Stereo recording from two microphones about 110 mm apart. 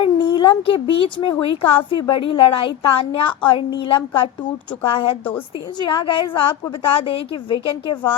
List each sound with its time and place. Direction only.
0.0 s a woman's voice: 50° left (ahead or behind)